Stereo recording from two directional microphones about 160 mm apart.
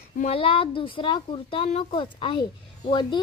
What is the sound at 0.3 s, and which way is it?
A child's voice, 35° left (ahead or behind).